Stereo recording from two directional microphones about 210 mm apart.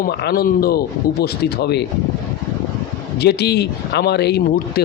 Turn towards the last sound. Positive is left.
turn(degrees=50)  # may be behind; listen again after turning